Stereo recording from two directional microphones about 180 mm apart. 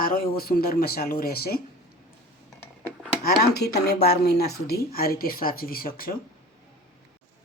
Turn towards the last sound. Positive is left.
turn(degrees=55)  # may be behind; listen again after turning